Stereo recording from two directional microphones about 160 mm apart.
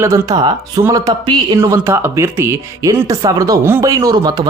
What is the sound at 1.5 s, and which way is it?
Speech, 15° right (ahead or behind).